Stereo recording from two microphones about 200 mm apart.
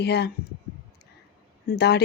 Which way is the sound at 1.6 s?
50° left (ahead or behind).